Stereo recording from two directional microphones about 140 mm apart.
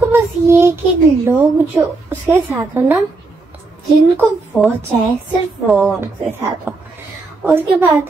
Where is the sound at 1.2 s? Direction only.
15° right (ahead or behind).